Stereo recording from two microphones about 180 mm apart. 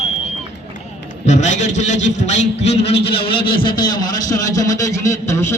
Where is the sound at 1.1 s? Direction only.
40° left (ahead or behind).